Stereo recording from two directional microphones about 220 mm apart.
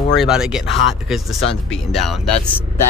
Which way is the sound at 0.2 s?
Centre (ahead or behind).